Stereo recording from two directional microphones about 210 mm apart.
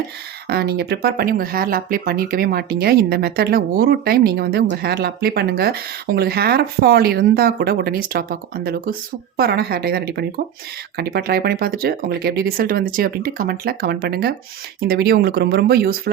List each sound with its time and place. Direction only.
0.4 s speech: 50° right (ahead or behind)